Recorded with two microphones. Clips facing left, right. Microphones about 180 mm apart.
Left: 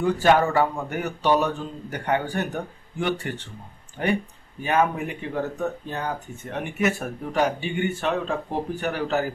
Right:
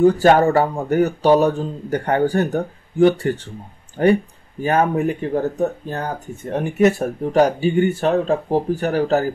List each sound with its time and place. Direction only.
0.0 s speech: 40° right (ahead or behind)